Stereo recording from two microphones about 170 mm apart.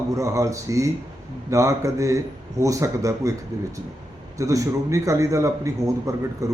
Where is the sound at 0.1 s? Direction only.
20° right (ahead or behind).